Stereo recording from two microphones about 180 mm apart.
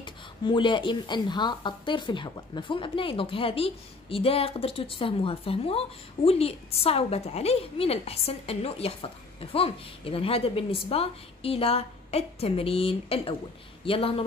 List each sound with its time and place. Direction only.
0.0 s speech: 25° left (ahead or behind)